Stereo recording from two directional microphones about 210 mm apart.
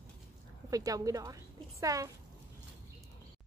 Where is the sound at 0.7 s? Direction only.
15° right (ahead or behind).